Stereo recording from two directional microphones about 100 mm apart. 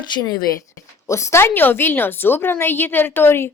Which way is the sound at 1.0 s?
30° left (ahead or behind).